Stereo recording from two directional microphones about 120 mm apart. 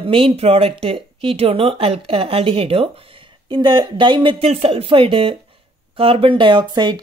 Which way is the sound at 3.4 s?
40° right (ahead or behind).